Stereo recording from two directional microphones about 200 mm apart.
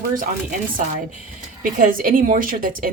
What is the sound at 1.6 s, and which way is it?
A woman's voice, 45° right (ahead or behind).